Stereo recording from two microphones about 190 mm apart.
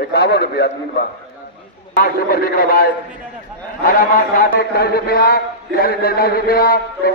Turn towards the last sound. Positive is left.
turn(degrees=50)  # may be behind; listen again after turning